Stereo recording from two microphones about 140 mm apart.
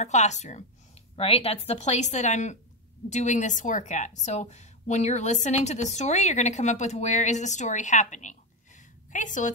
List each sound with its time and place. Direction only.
0.0 s a woman's voice: 55° left (ahead or behind)
1.1 s a woman's voice: 45° left (ahead or behind); by 9.5 s 65° left (ahead or behind)